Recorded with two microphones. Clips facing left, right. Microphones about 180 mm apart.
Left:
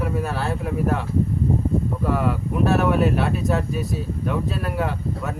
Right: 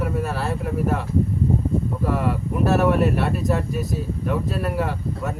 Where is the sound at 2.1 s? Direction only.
Centre (ahead or behind).